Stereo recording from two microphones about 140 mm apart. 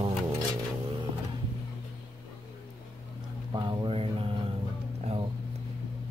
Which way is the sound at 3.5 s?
35° right (ahead or behind).